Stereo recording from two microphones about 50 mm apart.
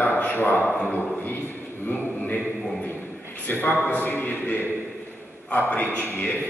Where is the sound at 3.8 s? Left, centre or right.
Left.